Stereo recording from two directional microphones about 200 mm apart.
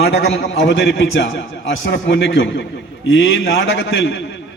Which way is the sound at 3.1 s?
75° left (ahead or behind).